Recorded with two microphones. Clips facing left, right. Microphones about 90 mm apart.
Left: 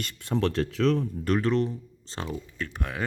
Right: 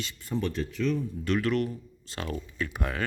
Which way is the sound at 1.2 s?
35° left (ahead or behind).